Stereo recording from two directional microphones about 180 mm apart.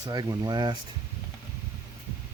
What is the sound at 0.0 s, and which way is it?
Speech, 20° right (ahead or behind).